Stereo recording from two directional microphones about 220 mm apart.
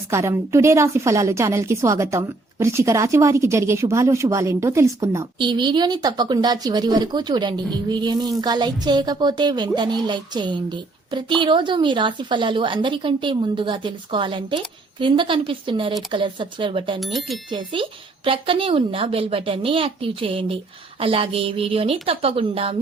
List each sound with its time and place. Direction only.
0.1 s a woman's voice: 10° right (ahead or behind)
17.0 s speech: centre (ahead or behind)
17.5 s a woman's voice: 25° right (ahead or behind)